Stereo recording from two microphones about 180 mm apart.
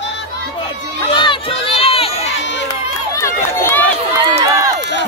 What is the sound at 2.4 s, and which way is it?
Run, 80° left.